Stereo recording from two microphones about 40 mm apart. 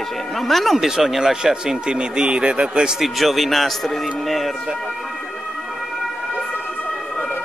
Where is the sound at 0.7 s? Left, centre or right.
Centre.